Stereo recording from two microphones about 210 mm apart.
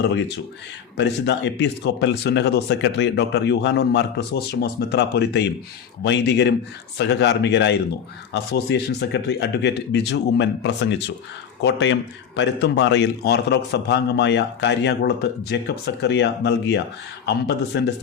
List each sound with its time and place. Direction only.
0.0 s speech: 60° left (ahead or behind)